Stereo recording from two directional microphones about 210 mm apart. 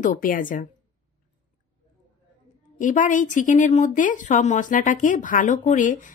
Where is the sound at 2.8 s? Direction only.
35° left (ahead or behind).